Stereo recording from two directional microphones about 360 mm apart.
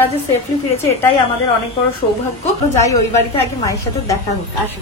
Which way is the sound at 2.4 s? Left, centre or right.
Centre.